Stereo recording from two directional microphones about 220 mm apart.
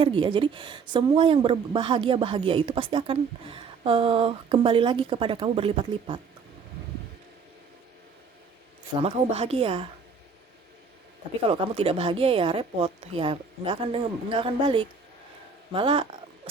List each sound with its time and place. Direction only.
0.0 s speech: 20° right (ahead or behind)
9.0 s speech: 25° right (ahead or behind)
11.4 s speech: 25° right (ahead or behind)